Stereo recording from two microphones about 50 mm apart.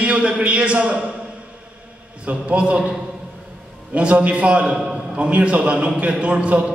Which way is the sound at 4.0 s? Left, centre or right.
Right.